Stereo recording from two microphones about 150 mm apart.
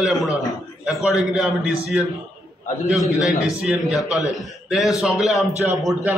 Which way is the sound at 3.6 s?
5° right (ahead or behind).